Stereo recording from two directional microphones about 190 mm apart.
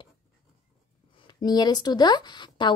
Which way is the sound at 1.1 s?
20° left (ahead or behind).